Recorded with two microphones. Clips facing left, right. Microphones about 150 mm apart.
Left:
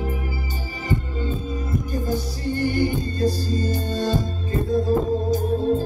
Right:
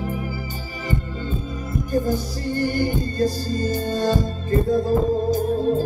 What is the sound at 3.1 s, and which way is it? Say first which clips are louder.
Music: even; 40° right (ahead or behind).